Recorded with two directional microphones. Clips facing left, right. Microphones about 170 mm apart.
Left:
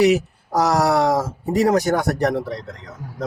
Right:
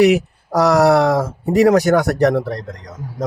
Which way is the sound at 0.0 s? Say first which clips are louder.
Right 3 dB; 65° right (ahead or behind).